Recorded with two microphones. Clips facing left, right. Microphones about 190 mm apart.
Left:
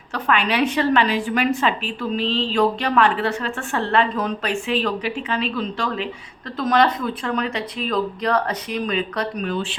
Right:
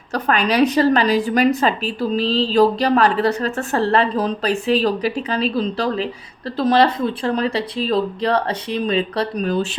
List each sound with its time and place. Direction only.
0.1 s a woman's voice: 40° right (ahead or behind)